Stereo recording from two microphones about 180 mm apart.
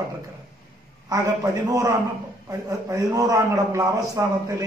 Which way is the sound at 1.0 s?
20° right (ahead or behind).